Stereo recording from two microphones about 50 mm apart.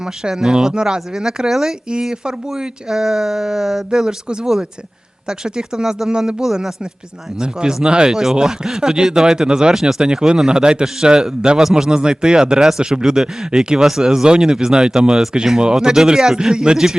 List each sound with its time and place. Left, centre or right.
0.3 s speech: centre
5.5 s speech: centre